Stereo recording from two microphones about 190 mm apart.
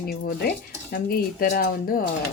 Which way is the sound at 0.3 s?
55° left (ahead or behind).